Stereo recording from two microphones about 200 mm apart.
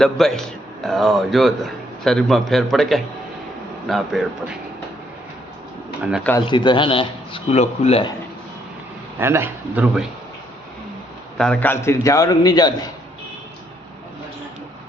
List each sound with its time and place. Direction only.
0.0 s a man's voice: centre (ahead or behind)
6.0 s a man's voice: 5° right (ahead or behind)
6.4 s speech: 25° left (ahead or behind)
9.1 s speech: 10° right (ahead or behind)
11.3 s a man's voice: 5° left (ahead or behind)